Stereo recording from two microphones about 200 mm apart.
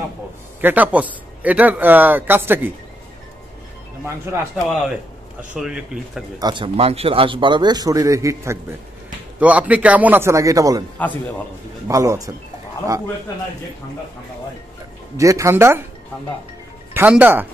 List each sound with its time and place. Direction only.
0.6 s speech: 10° right (ahead or behind)
4.0 s speech: 10° right (ahead or behind)
5.5 s speech: 5° right (ahead or behind)
6.4 s a man's voice: 25° right (ahead or behind)
11.0 s a man's voice: 5° left (ahead or behind)
11.9 s speech: 15° right (ahead or behind)
15.1 s speech: 15° right (ahead or behind)
16.9 s speech: 10° right (ahead or behind)